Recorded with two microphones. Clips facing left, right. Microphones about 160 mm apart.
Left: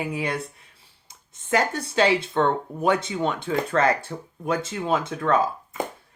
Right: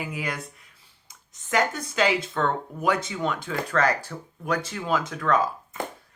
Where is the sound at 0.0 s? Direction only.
30° left (ahead or behind).